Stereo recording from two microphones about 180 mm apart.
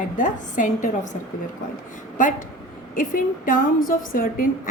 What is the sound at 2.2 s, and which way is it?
A woman's voice, 45° left (ahead or behind).